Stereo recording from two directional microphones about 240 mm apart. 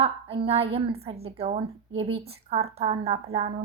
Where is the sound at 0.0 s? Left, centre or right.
Right.